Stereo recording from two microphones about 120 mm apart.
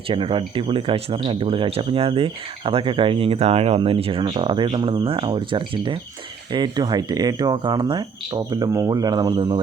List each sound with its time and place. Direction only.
0.1 s speech: 45° right (ahead or behind)